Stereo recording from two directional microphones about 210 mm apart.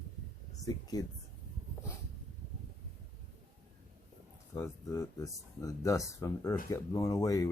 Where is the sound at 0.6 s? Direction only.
15° left (ahead or behind).